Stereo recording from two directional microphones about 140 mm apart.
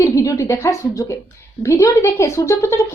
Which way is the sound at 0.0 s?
20° left (ahead or behind).